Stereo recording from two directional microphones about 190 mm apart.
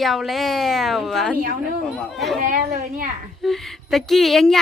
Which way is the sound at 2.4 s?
40° right (ahead or behind).